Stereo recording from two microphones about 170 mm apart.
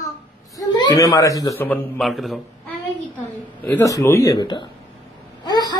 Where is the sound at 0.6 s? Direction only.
25° left (ahead or behind).